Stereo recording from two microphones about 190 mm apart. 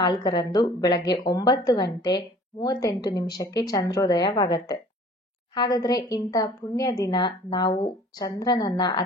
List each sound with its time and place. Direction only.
0.0 s a woman's voice: 25° left (ahead or behind)